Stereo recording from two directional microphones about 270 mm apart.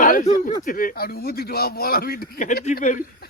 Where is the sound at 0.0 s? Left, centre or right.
Left.